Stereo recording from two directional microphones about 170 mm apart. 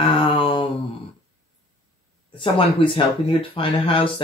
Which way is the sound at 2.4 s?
30° left (ahead or behind).